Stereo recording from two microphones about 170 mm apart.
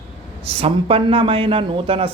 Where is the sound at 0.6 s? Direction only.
35° right (ahead or behind).